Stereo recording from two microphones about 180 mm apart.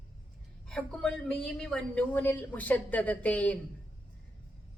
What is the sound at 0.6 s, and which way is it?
A woman's voice, 5° left (ahead or behind).